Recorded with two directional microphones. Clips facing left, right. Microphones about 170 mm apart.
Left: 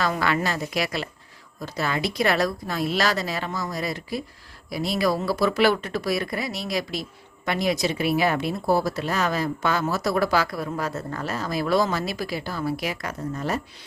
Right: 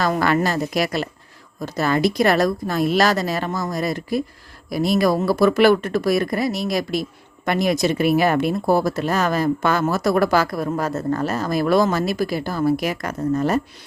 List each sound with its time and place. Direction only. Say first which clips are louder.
0.0 s speech: right 5 dB; 45° right (ahead or behind)